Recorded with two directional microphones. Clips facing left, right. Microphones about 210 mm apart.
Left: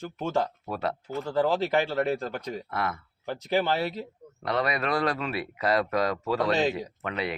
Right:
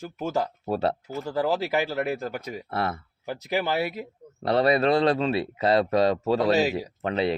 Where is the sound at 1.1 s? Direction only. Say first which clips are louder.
Even; 10° right (ahead or behind).